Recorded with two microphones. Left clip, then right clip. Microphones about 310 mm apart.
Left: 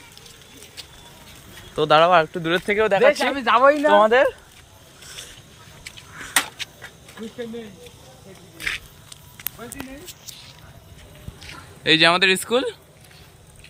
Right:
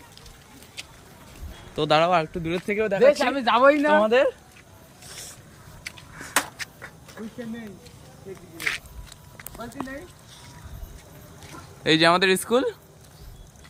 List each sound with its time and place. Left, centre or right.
1.7 s speech: centre
5.8 s a sound: centre
8.5 s walk: centre
11.4 s speech: centre